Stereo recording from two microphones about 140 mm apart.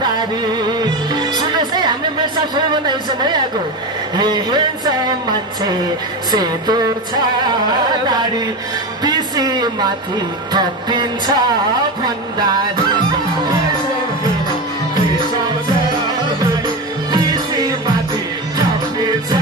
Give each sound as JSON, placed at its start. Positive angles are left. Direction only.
{"t": 0.7, "sound": "music", "side_deg": -30}
{"t": 6.3, "sound": "music", "side_deg": -30}
{"t": 9.0, "sound": "music", "side_deg": -30}
{"t": 16.6, "sound": "music", "side_deg": -30}